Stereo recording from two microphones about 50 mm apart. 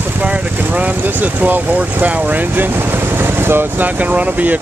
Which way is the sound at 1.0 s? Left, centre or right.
Right.